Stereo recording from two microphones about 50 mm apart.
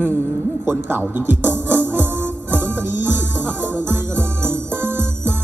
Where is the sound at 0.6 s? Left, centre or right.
Right.